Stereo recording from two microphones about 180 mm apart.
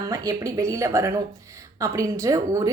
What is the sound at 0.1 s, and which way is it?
A woman's voice, 20° right (ahead or behind).